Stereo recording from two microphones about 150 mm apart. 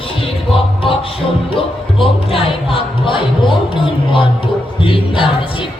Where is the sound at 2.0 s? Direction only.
35° left (ahead or behind).